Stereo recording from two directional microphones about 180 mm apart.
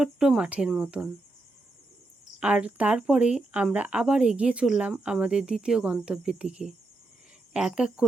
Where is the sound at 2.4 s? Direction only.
5° right (ahead or behind).